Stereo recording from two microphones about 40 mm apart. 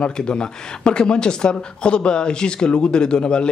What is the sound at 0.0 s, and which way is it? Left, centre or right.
Speech, left.